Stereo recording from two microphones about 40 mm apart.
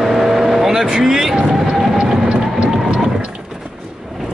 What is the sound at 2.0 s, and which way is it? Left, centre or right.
Train, right.